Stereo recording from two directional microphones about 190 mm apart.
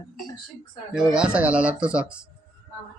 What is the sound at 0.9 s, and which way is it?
Speech, 5° right (ahead or behind).